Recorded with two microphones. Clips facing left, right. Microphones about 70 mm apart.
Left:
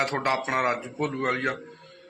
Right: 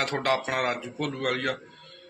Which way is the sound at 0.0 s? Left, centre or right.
Left.